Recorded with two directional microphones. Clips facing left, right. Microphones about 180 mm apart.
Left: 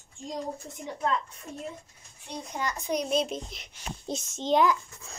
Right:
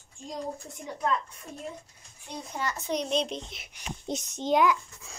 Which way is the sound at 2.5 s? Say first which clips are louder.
Left 1 dB; 15° left (ahead or behind).